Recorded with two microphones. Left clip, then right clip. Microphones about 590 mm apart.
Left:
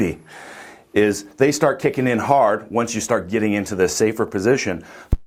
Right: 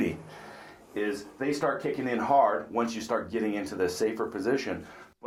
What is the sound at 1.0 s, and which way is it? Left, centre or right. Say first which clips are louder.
Speech: left 12 dB; left.